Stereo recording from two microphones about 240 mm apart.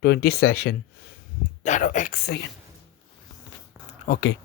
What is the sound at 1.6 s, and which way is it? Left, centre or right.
Speech, left.